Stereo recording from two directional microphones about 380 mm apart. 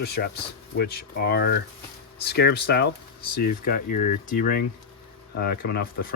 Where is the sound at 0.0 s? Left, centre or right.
Left.